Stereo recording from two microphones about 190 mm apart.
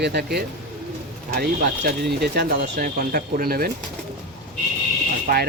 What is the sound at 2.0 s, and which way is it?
Speech, 60° right (ahead or behind).